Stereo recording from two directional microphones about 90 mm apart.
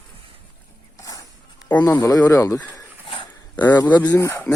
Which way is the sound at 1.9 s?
35° left (ahead or behind).